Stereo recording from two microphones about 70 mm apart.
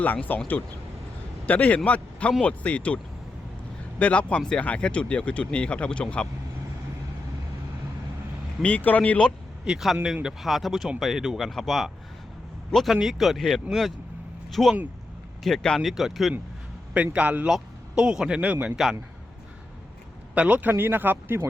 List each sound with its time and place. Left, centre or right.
0.0 s a man's voice: left
8.6 s a man's voice: left
9.6 s speech: centre
16.9 s speech: right
20.3 s speech: right